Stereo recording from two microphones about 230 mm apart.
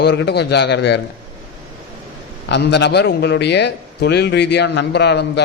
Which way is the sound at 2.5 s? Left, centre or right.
Left.